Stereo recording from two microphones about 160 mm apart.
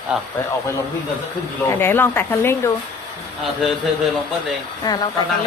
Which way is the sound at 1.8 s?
15° left (ahead or behind).